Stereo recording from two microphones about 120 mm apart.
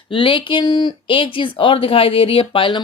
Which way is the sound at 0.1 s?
45° left (ahead or behind).